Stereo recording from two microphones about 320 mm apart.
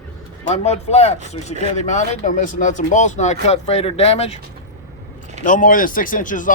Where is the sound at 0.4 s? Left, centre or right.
Left.